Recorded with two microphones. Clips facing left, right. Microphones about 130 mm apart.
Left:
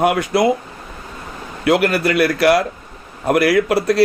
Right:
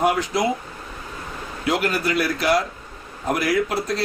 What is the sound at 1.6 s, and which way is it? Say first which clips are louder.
Speech: left 7 dB; 65° left (ahead or behind).